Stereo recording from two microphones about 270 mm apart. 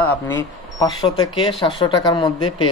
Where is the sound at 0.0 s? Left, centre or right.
Centre.